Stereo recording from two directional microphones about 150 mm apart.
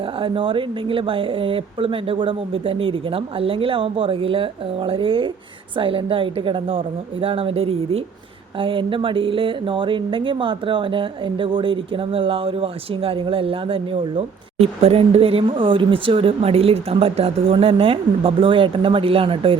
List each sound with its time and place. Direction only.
0.2 s speech: 35° right (ahead or behind)